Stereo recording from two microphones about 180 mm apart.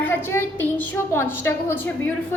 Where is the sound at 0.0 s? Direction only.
10° left (ahead or behind).